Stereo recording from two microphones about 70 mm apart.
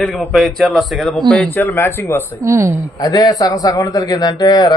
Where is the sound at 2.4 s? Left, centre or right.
Right.